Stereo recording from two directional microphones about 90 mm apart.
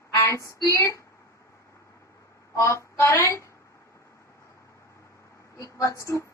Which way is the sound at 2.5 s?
35° left (ahead or behind).